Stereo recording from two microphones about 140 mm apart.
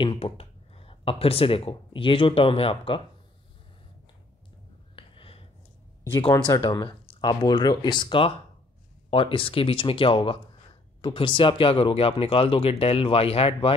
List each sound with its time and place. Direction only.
0.0 s speech: 40° left (ahead or behind)
4.9 s a sound: 40° left (ahead or behind)
6.0 s speech: 40° left (ahead or behind)